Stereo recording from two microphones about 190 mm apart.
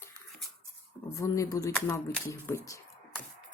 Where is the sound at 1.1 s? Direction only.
15° left (ahead or behind).